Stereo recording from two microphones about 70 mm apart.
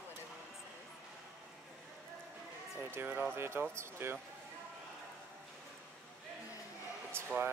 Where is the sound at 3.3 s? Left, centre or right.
Right.